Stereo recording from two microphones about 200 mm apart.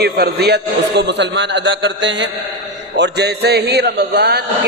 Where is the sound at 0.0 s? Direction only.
55° right (ahead or behind).